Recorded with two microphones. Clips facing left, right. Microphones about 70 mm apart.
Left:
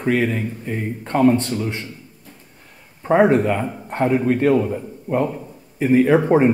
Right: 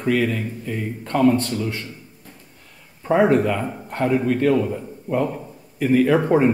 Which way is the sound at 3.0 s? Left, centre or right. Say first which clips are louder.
Left 2 dB; centre.